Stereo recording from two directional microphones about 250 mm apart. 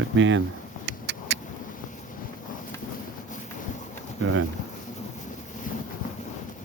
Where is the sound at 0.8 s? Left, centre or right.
Right.